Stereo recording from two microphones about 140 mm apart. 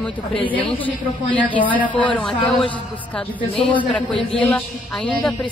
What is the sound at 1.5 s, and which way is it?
Speech, 10° left (ahead or behind).